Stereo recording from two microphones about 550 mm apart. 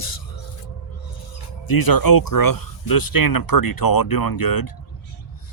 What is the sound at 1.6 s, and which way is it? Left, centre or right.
Speech, left.